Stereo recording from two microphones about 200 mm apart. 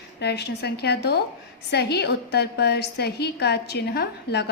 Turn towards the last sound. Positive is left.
turn(degrees=55)  # may be behind; listen again after turning